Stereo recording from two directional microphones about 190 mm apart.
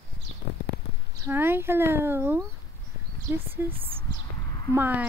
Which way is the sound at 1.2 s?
10° right (ahead or behind).